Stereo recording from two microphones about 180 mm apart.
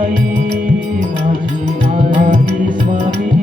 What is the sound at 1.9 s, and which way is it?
Music, 45° right (ahead or behind).